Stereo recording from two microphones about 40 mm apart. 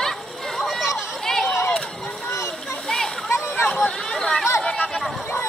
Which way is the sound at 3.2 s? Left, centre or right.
Left.